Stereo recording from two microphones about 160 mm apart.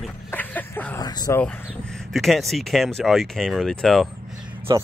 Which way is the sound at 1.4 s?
10° left (ahead or behind).